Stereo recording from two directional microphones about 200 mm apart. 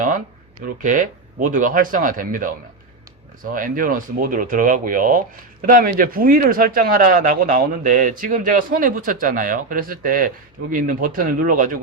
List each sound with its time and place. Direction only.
0.8 s speech: 40° right (ahead or behind)